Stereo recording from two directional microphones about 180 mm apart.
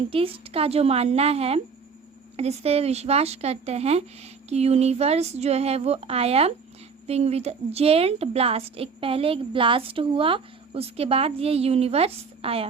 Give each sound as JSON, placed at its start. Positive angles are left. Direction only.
{"t": 0.1, "sound": "a woman's voice", "side_deg": -30}